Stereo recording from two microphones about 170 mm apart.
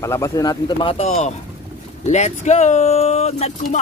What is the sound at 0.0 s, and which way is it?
Speech, 20° left (ahead or behind).